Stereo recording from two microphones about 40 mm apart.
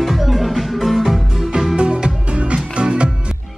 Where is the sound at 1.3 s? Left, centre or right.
Centre.